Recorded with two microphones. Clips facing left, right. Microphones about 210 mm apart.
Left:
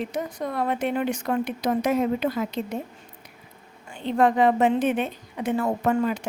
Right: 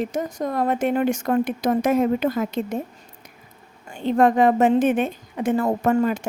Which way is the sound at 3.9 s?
45° right (ahead or behind).